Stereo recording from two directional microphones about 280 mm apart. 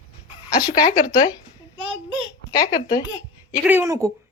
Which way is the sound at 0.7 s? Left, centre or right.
Centre.